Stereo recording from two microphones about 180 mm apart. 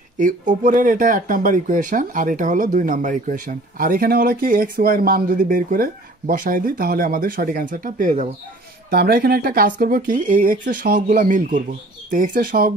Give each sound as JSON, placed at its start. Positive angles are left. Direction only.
{"t": 0.2, "sound": "speech", "side_deg": -45}
{"t": 8.9, "sound": "speech", "side_deg": -60}